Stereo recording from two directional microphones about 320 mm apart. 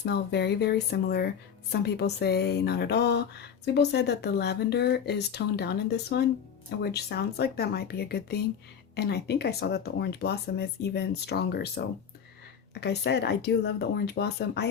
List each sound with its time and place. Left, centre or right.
0.0 s speech: left